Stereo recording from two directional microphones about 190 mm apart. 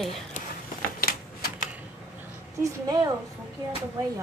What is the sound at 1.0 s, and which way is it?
Typewriter, 50° left (ahead or behind).